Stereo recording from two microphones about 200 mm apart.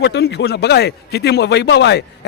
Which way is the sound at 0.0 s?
60° left (ahead or behind).